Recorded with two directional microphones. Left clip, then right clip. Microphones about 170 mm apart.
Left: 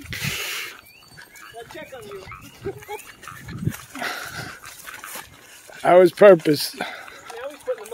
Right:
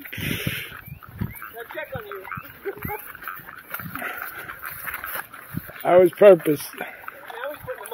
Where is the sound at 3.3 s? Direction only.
35° left (ahead or behind).